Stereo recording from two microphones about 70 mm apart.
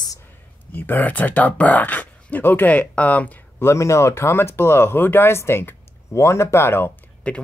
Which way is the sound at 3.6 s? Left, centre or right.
Left.